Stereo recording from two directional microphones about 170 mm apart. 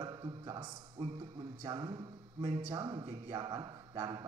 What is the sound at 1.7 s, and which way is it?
A man's voice, 25° right (ahead or behind).